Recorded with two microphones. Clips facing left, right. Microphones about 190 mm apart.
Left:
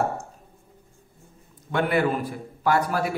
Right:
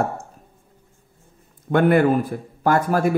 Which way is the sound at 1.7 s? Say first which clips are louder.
Right 7 dB; 50° right (ahead or behind).